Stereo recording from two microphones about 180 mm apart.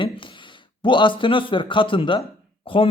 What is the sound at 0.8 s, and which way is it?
A man's voice, 25° left (ahead or behind).